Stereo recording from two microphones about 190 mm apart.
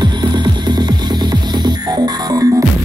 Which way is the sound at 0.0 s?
25° right (ahead or behind).